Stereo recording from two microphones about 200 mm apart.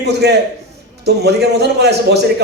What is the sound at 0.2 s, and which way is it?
A man's voice, 55° right (ahead or behind).